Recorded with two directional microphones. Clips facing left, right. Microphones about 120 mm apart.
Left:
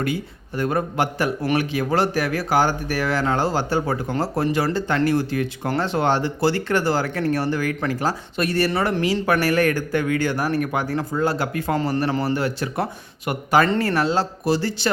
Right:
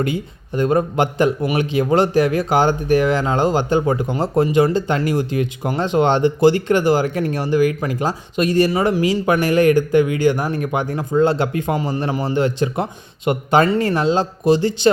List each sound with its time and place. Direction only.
0.0 s speech: 20° right (ahead or behind)